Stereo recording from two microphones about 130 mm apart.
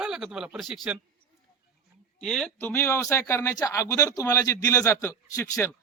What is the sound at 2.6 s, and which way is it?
Speech, 15° left (ahead or behind).